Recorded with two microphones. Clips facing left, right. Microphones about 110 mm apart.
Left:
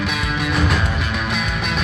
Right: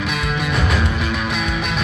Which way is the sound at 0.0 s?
Centre (ahead or behind).